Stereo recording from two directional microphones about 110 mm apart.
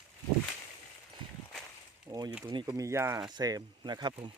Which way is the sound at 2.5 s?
45° right (ahead or behind).